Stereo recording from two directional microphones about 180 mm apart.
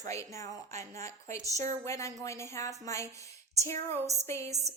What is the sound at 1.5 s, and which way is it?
Speech, 40° right (ahead or behind).